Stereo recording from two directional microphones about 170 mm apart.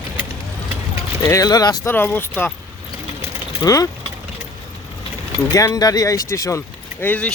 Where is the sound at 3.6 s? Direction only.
20° left (ahead or behind).